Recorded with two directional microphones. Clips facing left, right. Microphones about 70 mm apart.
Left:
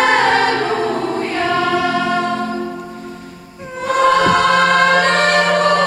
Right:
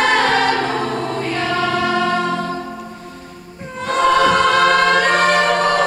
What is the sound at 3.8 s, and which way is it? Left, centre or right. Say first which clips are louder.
Choir: left 1 dB; centre.